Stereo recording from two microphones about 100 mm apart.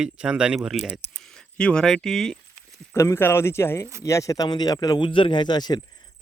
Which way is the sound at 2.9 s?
30° left (ahead or behind).